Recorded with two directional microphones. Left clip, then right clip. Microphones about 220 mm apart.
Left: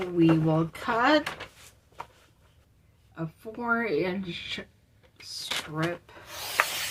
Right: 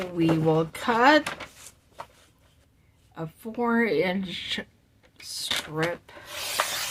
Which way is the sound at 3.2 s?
45° right (ahead or behind).